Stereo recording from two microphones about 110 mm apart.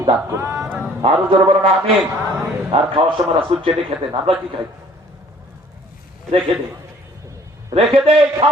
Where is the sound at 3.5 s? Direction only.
65° right (ahead or behind).